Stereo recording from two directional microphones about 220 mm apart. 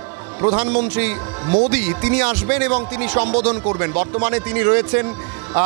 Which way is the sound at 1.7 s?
10° right (ahead or behind).